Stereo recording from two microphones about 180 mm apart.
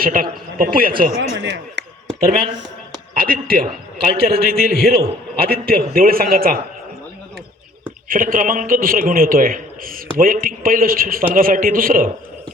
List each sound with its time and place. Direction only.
0.0 s a man's voice: 50° right (ahead or behind)
1.4 s speech: 80° right
2.2 s a man's voice: 55° right (ahead or behind)
8.0 s a man's voice: 50° right (ahead or behind)